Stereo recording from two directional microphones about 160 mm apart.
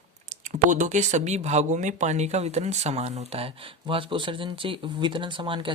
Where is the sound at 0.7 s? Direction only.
50° right (ahead or behind).